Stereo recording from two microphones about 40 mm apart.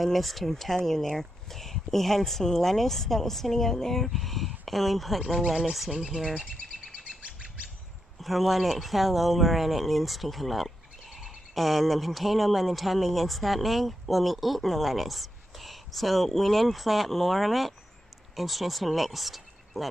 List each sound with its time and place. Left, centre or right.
0.0 s speech: centre
7.2 s bird: right
8.2 s speech: centre